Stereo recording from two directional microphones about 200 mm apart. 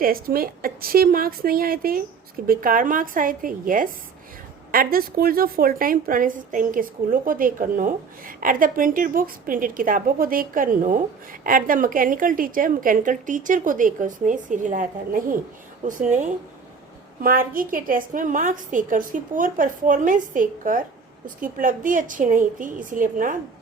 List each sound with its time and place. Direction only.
0.0 s a woman's voice: 45° right (ahead or behind)